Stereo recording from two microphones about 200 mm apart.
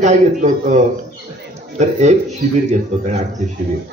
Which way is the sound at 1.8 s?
35° right (ahead or behind).